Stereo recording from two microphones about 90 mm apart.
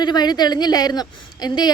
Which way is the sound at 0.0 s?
50° left (ahead or behind).